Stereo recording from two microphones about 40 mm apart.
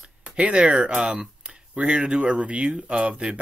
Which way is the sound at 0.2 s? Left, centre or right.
Right.